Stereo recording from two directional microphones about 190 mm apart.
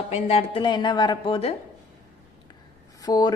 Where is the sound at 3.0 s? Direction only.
20° left (ahead or behind).